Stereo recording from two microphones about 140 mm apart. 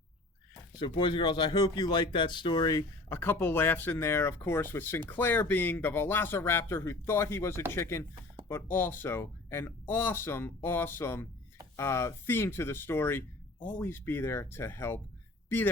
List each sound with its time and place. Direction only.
0.8 s speech: 35° left (ahead or behind); by 15.7 s 15° left (ahead or behind)